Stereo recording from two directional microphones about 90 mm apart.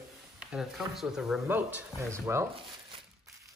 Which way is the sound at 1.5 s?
20° right (ahead or behind).